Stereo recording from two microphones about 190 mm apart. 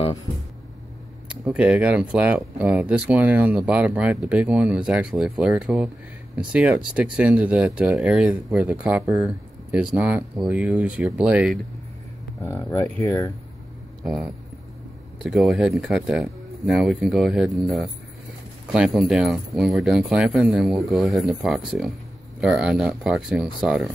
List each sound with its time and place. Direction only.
1.3 s speech: 5° right (ahead or behind)
12.4 s speech: 15° left (ahead or behind)
14.0 s speech: centre (ahead or behind)